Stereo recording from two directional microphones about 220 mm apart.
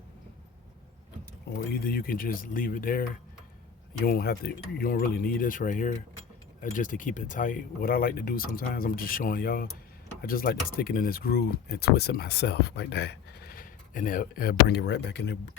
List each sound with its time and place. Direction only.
1.7 s speech: 40° left (ahead or behind)
4.0 s speech: 45° left (ahead or behind)